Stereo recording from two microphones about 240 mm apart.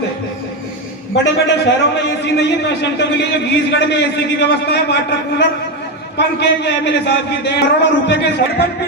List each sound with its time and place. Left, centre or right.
1.1 s a man's voice: left
6.1 s a man's voice: left